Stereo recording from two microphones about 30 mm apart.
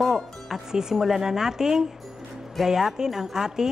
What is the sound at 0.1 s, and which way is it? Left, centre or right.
Music, centre.